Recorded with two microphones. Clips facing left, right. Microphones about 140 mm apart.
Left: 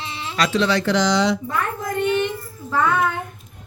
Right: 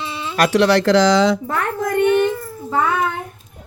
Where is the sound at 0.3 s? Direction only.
60° right (ahead or behind).